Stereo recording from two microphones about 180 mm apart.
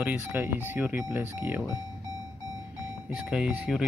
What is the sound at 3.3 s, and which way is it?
Speech, 5° right (ahead or behind).